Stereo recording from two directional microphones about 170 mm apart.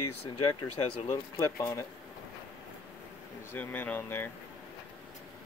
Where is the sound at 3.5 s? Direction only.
10° left (ahead or behind).